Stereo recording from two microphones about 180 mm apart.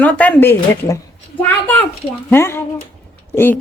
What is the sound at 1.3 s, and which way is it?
Speech, 30° left (ahead or behind).